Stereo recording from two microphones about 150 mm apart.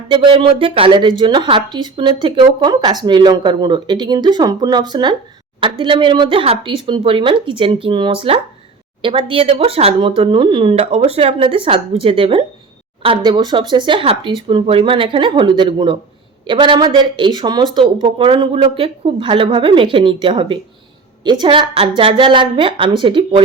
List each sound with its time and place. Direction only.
0.1 s speech: 35° right (ahead or behind)